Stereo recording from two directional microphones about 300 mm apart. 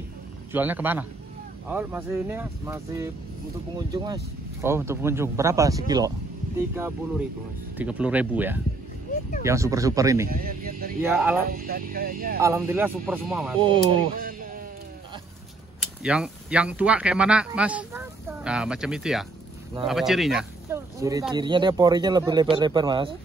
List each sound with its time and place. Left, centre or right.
0.5 s speech: centre
10.2 s speech: right
11.0 s speech: centre
11.4 s speech: right
12.4 s speech: centre
14.2 s a sound: right
15.8 s speech: centre